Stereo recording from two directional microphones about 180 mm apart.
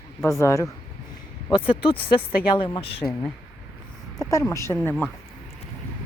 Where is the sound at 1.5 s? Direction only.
30° left (ahead or behind).